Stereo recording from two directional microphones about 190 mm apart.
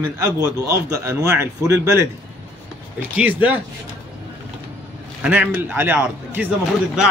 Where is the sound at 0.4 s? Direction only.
15° right (ahead or behind).